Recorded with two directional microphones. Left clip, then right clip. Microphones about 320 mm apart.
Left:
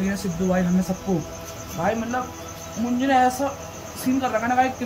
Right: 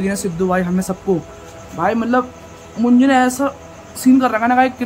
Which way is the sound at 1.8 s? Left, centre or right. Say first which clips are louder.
Right 6 dB; right.